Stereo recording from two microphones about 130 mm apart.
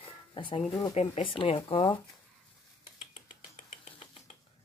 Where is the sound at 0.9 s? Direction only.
55° left (ahead or behind).